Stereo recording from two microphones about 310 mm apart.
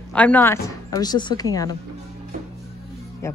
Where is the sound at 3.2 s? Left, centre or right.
Centre.